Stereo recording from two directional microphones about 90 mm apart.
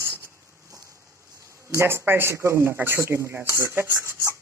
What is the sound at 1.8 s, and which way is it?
Speech, 25° right (ahead or behind).